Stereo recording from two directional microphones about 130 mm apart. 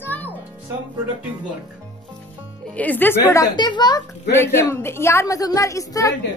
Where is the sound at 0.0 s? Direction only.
15° left (ahead or behind).